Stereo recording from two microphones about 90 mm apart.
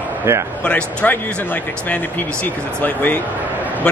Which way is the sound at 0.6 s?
15° left (ahead or behind).